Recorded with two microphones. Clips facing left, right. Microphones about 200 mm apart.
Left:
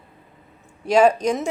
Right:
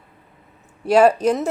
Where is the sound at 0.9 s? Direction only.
5° right (ahead or behind).